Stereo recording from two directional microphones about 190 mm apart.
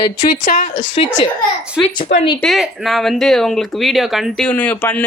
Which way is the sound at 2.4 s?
Centre (ahead or behind).